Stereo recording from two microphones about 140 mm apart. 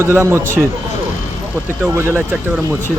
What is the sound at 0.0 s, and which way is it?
Speech, 20° right (ahead or behind).